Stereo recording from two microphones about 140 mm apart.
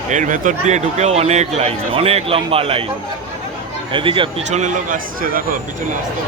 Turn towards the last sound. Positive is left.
turn(degrees=-80)